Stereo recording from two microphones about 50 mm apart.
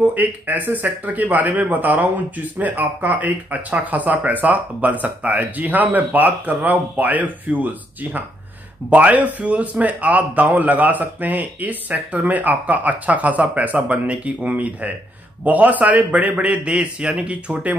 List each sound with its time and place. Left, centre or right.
0.0 s a man's voice: right